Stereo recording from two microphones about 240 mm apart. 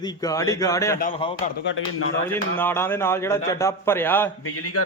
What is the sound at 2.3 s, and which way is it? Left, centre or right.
A man's voice, centre.